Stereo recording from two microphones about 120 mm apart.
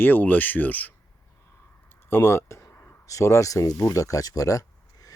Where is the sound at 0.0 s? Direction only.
15° left (ahead or behind).